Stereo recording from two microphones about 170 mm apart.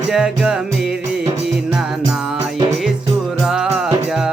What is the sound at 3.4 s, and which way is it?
Music, centre (ahead or behind).